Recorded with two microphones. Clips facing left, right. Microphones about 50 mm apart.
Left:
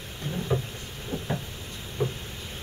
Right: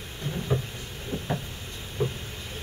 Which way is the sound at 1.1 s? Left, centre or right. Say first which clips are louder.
Even; right.